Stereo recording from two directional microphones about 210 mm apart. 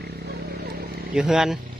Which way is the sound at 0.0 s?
50° right (ahead or behind).